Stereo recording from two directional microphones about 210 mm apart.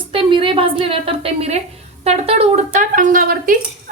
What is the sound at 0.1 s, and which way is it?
A woman's voice, 25° right (ahead or behind).